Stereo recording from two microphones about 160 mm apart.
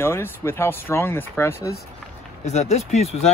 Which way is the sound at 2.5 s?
45° left (ahead or behind).